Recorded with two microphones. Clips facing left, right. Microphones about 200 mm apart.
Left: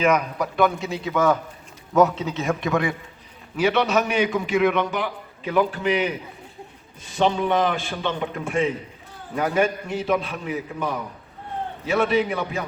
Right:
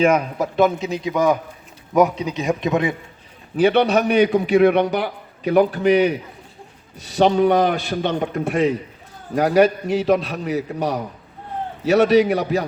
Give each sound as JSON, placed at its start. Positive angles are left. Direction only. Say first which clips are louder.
{"t": 0.0, "sound": "a man's voice", "louder": "right 4 dB", "side_deg": -30}
{"t": 3.6, "sound": "a man's voice", "louder": "right 5 dB", "side_deg": -35}